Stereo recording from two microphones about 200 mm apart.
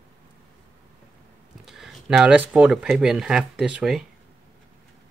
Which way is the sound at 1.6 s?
Centre (ahead or behind).